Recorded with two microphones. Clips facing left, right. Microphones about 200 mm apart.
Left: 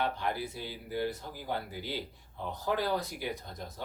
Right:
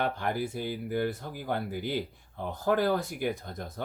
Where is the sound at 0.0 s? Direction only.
50° right (ahead or behind).